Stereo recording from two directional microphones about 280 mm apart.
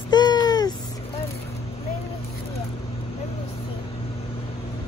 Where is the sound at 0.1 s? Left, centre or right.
Centre.